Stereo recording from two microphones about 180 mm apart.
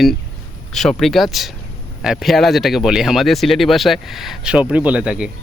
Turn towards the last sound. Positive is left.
turn(degrees=-5)  # may be behind; listen again after turning